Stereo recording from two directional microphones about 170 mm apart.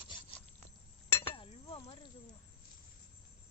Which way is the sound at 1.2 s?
30° left (ahead or behind).